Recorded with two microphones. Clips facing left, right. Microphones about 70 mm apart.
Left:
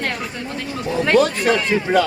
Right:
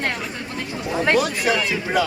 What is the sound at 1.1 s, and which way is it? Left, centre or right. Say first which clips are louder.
Speech: left 4 dB; centre.